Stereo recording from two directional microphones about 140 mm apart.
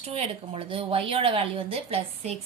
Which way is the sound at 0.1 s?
40° right (ahead or behind).